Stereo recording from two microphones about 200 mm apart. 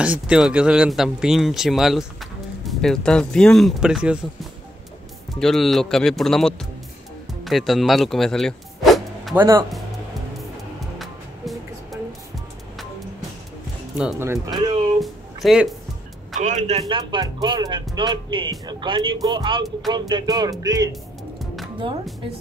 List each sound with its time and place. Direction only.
0.0 s speech: 5° right (ahead or behind)
5.4 s speech: centre (ahead or behind)
13.9 s speech: 10° right (ahead or behind)
15.0 s music: centre (ahead or behind)
16.3 s speech: 35° right (ahead or behind); by 20.9 s 20° right (ahead or behind)